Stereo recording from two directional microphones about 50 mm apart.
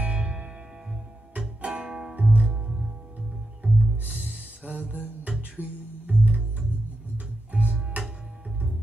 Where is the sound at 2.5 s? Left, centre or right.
Centre.